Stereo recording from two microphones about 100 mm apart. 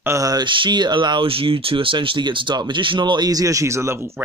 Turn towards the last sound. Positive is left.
turn(degrees=-25)  # may be behind; listen again after turning